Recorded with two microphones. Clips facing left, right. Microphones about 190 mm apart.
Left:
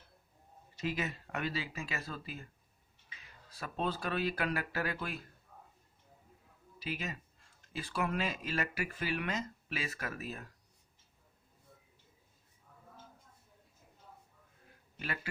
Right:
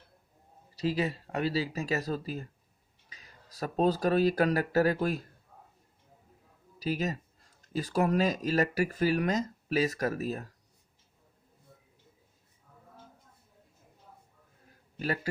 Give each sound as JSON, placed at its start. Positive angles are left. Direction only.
{"t": 0.8, "sound": "speech", "side_deg": -35}
{"t": 6.7, "sound": "speech", "side_deg": -40}
{"t": 14.9, "sound": "a man's voice", "side_deg": -40}